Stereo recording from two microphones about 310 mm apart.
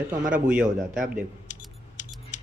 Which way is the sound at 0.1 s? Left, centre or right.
Centre.